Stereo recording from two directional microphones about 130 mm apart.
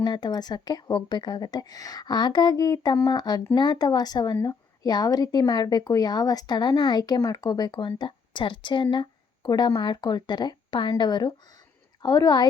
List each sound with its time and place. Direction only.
0.0 s speech: 35° left (ahead or behind)